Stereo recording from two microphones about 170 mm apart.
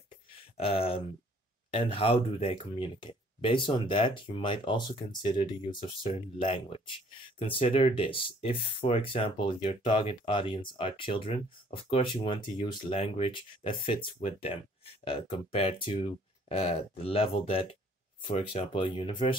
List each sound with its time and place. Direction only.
0.6 s speech: 35° left (ahead or behind)